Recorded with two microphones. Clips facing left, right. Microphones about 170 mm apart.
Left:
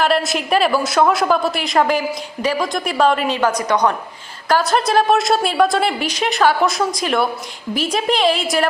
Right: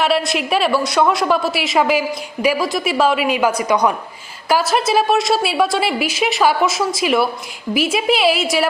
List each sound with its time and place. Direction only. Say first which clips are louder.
0.0 s a woman's voice: even; centre (ahead or behind)